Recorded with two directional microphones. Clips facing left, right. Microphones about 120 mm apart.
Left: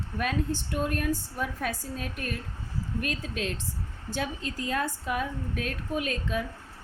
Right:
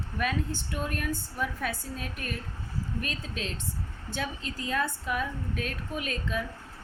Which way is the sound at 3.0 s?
55° left (ahead or behind).